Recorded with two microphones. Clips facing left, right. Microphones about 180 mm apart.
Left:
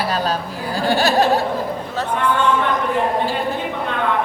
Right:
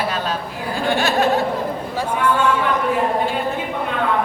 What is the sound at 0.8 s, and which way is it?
Laughter, 35° left (ahead or behind).